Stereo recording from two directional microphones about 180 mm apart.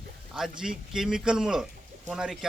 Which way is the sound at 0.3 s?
5° right (ahead or behind).